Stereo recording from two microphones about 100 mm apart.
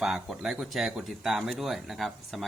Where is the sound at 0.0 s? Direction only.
5° right (ahead or behind).